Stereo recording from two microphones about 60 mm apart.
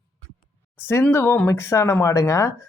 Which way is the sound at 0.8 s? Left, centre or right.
Left.